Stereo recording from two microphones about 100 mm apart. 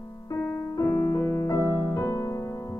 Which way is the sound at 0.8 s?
30° left (ahead or behind).